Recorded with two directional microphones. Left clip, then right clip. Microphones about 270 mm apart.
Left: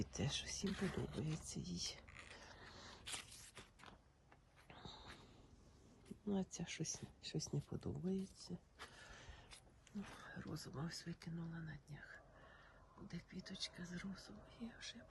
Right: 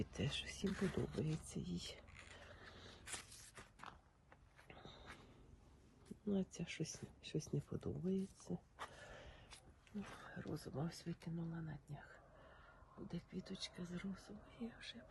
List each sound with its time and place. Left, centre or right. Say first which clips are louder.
0.2 s speech: left 1 dB; left
0.7 s speech: right 2 dB; centre
3.1 s a sound: left 2 dB; centre
6.1 s speech: right 1 dB; centre
8.8 s a sound: right 4 dB; centre
9.9 s speech: right 1 dB; centre
13.1 s speech: right 2 dB; centre